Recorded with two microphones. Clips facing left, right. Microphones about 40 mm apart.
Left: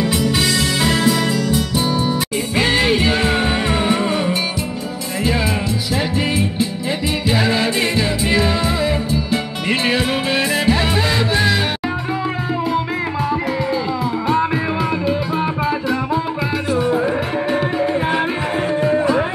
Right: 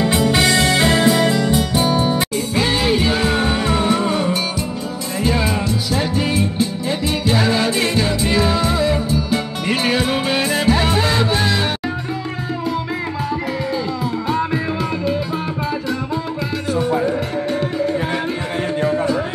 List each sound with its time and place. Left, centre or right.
0.0 s music: right
2.5 s music: centre
14.2 s music: centre
16.7 s music: centre
18.9 s music: left